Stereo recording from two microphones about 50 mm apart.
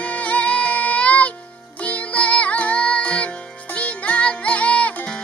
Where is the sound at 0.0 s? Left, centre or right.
Left.